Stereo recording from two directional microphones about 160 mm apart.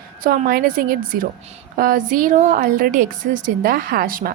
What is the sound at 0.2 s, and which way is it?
A woman's voice, 70° right (ahead or behind).